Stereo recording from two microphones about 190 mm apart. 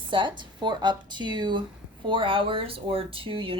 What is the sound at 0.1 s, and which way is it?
Speech, 25° right (ahead or behind).